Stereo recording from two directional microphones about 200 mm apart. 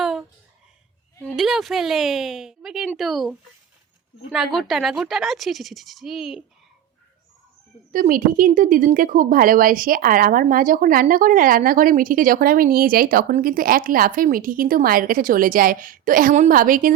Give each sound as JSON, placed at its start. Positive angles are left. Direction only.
{"t": 0.0, "sound": "a sound", "side_deg": 0}
{"t": 1.2, "sound": "speech", "side_deg": 0}
{"t": 7.9, "sound": "a woman's voice", "side_deg": -40}